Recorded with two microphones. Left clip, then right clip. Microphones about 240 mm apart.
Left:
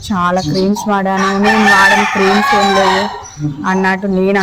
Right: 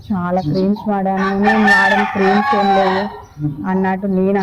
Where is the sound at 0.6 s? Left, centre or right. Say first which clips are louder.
Left 4 dB; left.